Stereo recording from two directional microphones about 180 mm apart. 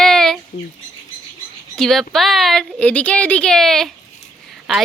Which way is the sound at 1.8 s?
Centre (ahead or behind).